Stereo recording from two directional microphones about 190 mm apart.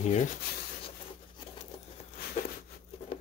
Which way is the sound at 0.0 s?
35° left (ahead or behind).